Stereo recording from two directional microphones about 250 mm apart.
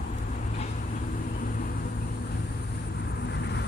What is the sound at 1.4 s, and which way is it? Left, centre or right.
Vehicle, left.